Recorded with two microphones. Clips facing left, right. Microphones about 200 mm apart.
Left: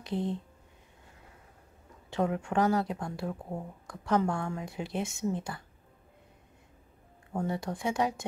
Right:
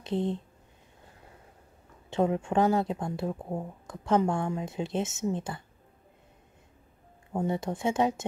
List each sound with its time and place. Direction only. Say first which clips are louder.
0.0 s speech: right 3 dB; 25° right (ahead or behind)
2.0 s speech: right 3 dB; 25° right (ahead or behind)
7.3 s speech: right 3 dB; 20° right (ahead or behind)